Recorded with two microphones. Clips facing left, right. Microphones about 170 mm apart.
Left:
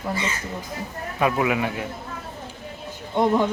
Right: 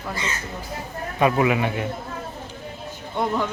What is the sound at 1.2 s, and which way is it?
Speech, centre (ahead or behind).